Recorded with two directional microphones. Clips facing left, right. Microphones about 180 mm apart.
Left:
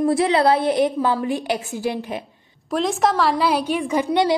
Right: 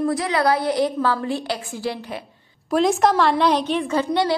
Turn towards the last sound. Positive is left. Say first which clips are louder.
# left 2 dB
turn(degrees=20)  # may be behind; listen again after turning